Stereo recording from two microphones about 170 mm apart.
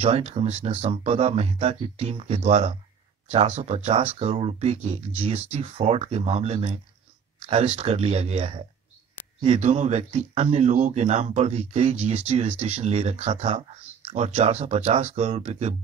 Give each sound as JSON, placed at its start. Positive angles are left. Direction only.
{"t": 0.0, "sound": "speech", "side_deg": -35}